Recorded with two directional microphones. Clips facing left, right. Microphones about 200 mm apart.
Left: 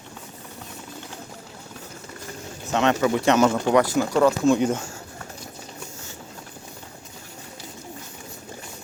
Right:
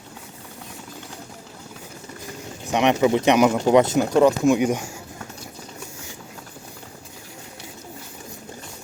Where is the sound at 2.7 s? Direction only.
15° right (ahead or behind).